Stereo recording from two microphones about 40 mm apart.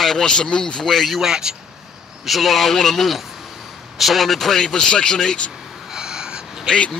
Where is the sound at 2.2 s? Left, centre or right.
Centre.